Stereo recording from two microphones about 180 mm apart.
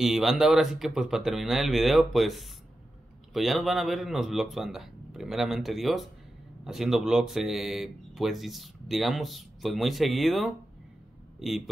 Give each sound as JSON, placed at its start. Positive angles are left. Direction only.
{"t": 0.0, "sound": "speech", "side_deg": 0}